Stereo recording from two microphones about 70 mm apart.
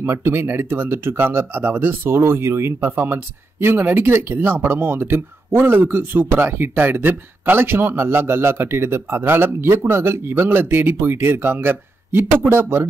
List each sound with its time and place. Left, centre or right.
0.0 s speech: right